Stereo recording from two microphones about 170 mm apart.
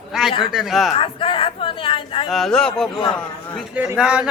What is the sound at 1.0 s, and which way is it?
Speech, 30° left (ahead or behind).